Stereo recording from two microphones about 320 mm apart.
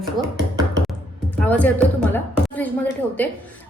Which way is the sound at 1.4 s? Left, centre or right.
Centre.